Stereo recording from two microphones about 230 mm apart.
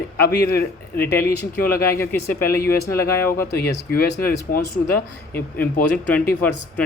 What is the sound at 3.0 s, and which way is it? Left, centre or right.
Speech, centre.